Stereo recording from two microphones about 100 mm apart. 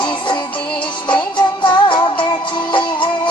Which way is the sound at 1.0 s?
55° left (ahead or behind).